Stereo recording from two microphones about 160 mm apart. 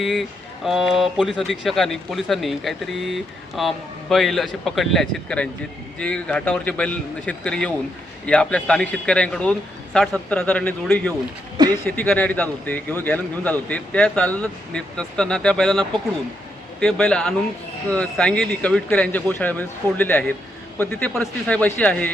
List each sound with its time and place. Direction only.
0.0 s speech: centre (ahead or behind)